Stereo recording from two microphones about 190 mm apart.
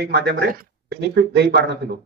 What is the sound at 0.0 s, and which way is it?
Speech, 60° right (ahead or behind).